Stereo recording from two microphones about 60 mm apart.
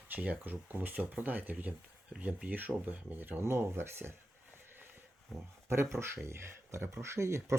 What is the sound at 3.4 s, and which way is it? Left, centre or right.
Speech, right.